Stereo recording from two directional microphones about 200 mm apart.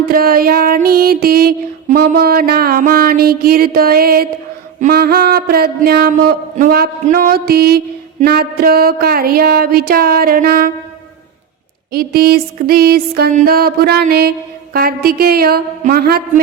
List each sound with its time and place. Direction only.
0.0 s music: 50° right (ahead or behind)
11.9 s music: 50° right (ahead or behind)